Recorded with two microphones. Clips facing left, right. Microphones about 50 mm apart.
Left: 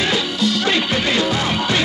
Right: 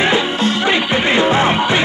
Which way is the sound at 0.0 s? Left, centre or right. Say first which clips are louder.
Right 4 dB; right.